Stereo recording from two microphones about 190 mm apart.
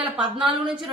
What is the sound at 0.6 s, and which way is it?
Speech, centre (ahead or behind).